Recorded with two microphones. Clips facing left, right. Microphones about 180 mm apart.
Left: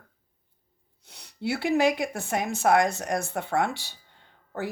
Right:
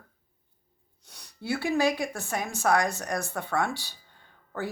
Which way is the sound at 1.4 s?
20° left (ahead or behind).